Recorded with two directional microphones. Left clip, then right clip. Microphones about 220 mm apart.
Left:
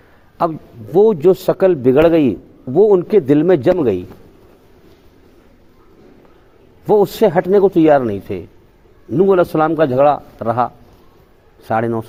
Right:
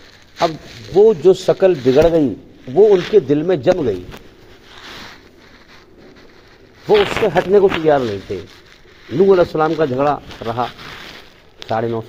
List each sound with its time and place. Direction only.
0.9 s speech: 50° left (ahead or behind)
6.8 s speech: 55° left (ahead or behind)
11.7 s speech: 55° left (ahead or behind)